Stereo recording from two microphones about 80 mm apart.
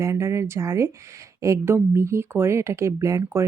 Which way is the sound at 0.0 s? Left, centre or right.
Right.